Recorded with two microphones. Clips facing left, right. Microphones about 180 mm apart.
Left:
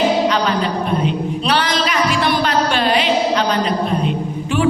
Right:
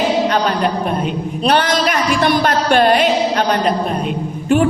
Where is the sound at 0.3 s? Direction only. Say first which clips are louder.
Right 1 dB; 50° right (ahead or behind).